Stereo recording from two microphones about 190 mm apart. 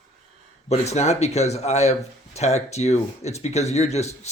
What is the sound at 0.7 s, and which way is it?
Speech, 35° left (ahead or behind).